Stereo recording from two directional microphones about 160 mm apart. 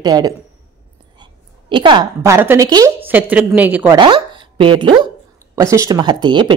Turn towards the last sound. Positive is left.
turn(degrees=-30)  # may be behind; listen again after turning